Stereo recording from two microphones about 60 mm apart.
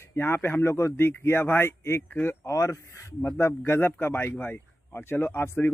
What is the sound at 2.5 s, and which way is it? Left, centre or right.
Speech, left.